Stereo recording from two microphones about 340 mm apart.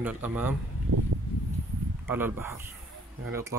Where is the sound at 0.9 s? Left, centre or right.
Right.